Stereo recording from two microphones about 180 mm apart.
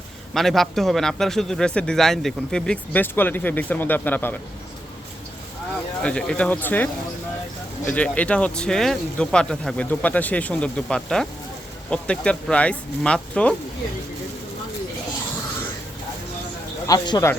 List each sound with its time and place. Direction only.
0.3 s speech: centre (ahead or behind)
6.0 s speech: 5° left (ahead or behind)
16.8 s a man's voice: 20° left (ahead or behind)